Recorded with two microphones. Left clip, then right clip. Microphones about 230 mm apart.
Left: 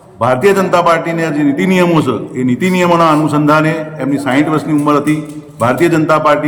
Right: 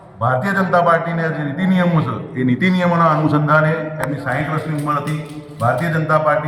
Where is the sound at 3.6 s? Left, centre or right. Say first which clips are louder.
Left 4 dB; centre.